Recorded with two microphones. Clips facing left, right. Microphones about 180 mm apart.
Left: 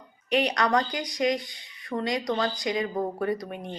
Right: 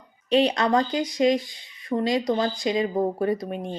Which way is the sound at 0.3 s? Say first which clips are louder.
Right 4 dB; 25° right (ahead or behind).